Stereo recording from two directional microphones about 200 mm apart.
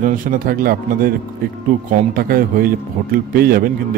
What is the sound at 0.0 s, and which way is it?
A man's voice, 45° right (ahead or behind).